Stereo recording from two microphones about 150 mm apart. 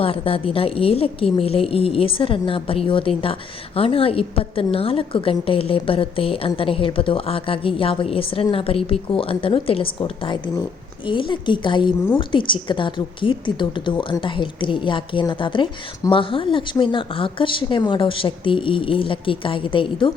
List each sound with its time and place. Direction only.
0.0 s a woman's voice: 40° left (ahead or behind)